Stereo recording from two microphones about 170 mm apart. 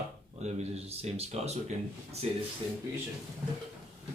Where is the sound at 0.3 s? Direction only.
40° right (ahead or behind).